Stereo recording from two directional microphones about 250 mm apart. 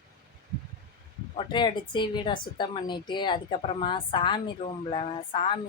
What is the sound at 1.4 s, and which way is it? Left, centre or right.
A woman's voice, centre.